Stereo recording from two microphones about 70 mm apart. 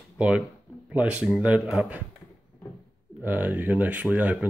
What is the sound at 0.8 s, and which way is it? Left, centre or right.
Speech, centre.